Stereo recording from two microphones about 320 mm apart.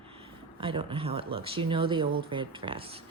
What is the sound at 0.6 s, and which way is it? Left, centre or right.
Speech, centre.